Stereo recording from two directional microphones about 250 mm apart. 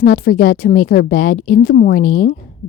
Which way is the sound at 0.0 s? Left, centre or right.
Left.